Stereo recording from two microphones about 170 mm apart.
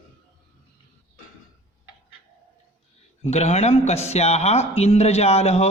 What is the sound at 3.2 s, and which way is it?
Speech, 40° left (ahead or behind).